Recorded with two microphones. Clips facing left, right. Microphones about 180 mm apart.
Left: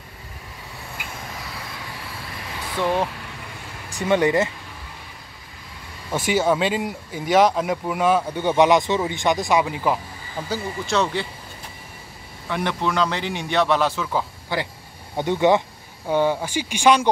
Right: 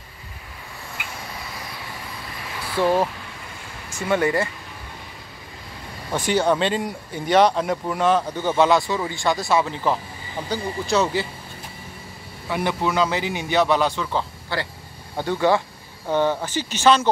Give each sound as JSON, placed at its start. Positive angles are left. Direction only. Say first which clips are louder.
{"t": 2.8, "sound": "speech", "louder": "right 3 dB", "side_deg": -10}
{"t": 4.1, "sound": "speech", "louder": "left 2 dB", "side_deg": 20}
{"t": 6.1, "sound": "speech", "louder": "even", "side_deg": 5}
{"t": 10.5, "sound": "a man's voice", "louder": "right 2 dB", "side_deg": 0}
{"t": 12.4, "sound": "a man's voice", "louder": "right 1 dB", "side_deg": -5}
{"t": 14.5, "sound": "speech", "louder": "left 2 dB", "side_deg": 15}